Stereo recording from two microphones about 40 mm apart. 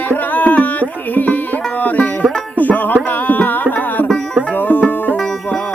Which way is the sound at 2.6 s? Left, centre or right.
Left.